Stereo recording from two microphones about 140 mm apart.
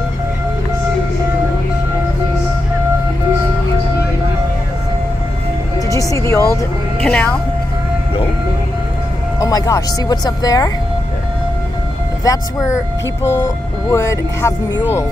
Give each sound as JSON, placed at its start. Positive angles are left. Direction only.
{"t": 5.8, "sound": "music", "side_deg": 25}
{"t": 7.0, "sound": "a woman's voice", "side_deg": 10}
{"t": 9.4, "sound": "speech", "side_deg": 25}
{"t": 12.3, "sound": "speech", "side_deg": 25}